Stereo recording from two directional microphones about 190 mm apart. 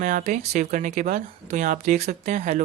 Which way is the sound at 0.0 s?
45° right (ahead or behind).